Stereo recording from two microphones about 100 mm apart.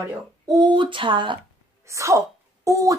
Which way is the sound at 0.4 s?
45° right (ahead or behind).